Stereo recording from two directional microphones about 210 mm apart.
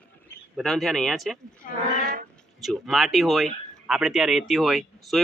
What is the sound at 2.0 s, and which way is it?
Speech, 45° right (ahead or behind).